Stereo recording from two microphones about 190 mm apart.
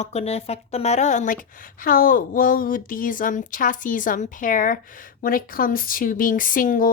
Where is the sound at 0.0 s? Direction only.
35° left (ahead or behind).